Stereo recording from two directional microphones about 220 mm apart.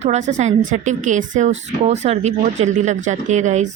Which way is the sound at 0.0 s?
30° right (ahead or behind).